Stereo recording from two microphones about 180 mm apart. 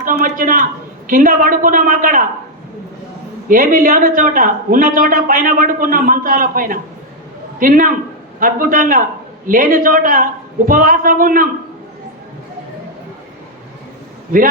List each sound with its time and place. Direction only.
0.0 s a man's voice: 50° right (ahead or behind)
3.5 s a man's voice: 50° right (ahead or behind)